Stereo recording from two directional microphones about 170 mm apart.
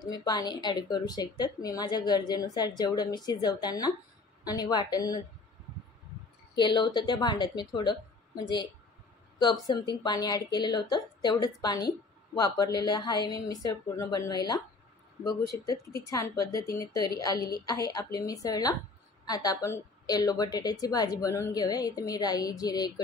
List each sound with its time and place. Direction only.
0.0 s speech: 25° left (ahead or behind)
6.5 s speech: 25° left (ahead or behind)
9.4 s speech: 25° left (ahead or behind)